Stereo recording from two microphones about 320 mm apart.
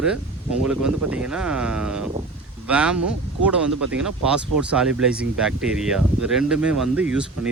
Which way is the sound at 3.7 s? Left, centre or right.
Right.